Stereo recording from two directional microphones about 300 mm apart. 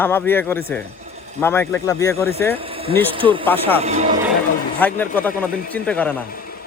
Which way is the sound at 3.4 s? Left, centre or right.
Centre.